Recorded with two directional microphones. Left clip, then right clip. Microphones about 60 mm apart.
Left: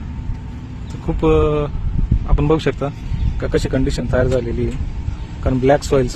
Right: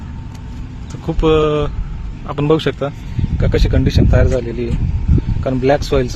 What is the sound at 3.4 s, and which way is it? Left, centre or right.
Speech, left.